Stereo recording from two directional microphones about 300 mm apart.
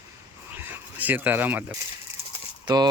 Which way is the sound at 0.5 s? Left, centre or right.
Centre.